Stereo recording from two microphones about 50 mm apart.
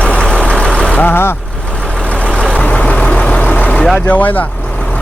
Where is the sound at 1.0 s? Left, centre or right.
Left.